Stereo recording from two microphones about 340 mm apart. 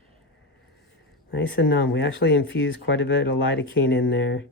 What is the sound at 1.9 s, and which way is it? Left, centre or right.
Speech, left.